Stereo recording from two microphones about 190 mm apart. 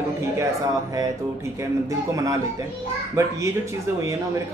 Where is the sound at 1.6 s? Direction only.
15° right (ahead or behind).